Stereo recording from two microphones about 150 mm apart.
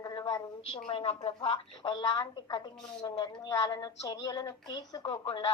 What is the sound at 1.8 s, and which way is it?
Speech, 30° left (ahead or behind).